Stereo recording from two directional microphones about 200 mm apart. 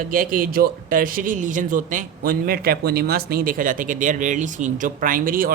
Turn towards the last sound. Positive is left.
turn(degrees=-45)  # may be behind; listen again after turning